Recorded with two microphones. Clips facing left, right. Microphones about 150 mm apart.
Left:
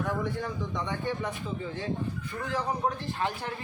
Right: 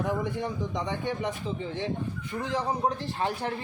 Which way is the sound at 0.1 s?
20° right (ahead or behind).